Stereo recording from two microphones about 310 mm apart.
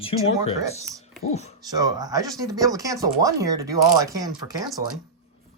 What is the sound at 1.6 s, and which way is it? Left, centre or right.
Speech, centre.